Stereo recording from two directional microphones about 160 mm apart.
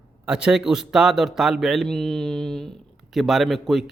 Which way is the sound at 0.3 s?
5° right (ahead or behind).